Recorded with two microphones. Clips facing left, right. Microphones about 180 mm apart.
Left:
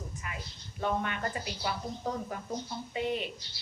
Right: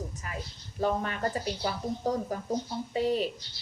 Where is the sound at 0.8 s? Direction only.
35° right (ahead or behind).